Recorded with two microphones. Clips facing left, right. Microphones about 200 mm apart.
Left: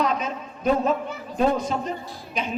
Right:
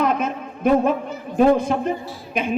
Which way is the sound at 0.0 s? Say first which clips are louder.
Right 4 dB; 55° right (ahead or behind).